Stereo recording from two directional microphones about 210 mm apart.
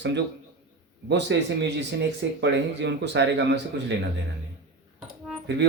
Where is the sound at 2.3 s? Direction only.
55° right (ahead or behind).